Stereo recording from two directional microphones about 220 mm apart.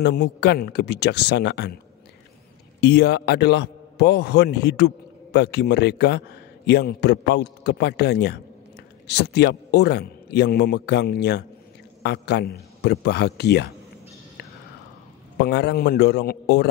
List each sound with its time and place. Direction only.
0.0 s speech: 45° left (ahead or behind)
2.8 s a man's voice: 50° left (ahead or behind)
15.3 s speech: 50° left (ahead or behind)